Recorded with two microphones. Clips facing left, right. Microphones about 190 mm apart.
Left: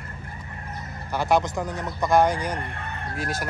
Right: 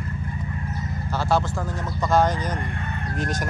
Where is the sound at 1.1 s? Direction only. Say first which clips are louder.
Left 1 dB; 15° left (ahead or behind).